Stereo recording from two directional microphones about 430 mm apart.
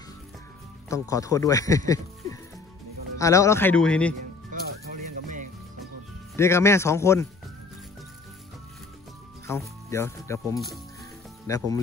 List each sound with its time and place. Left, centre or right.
0.8 s speech: centre
3.2 s speech: centre
4.5 s music: centre
6.3 s speech: centre
9.5 s speech: centre